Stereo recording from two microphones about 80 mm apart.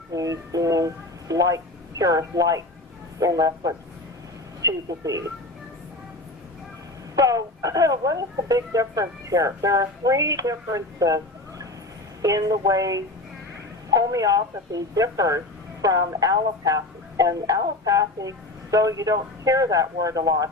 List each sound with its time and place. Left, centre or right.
0.1 s speech: right
7.2 s speech: right